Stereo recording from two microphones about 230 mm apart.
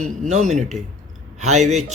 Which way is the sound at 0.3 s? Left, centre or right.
Right.